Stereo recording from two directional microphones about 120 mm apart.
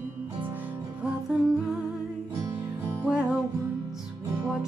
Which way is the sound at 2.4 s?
20° right (ahead or behind).